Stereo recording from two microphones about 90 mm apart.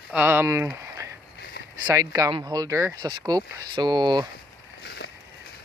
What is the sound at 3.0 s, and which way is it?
Speech, 45° right (ahead or behind).